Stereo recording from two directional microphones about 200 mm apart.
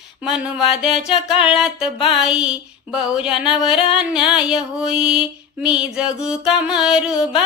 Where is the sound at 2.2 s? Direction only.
5° right (ahead or behind).